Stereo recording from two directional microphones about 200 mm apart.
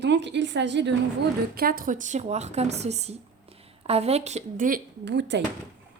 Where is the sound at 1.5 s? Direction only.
45° right (ahead or behind).